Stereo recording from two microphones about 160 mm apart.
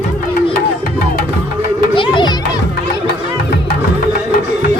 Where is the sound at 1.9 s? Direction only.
30° left (ahead or behind).